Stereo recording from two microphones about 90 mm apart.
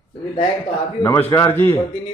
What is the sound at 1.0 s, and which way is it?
Speech, 30° left (ahead or behind).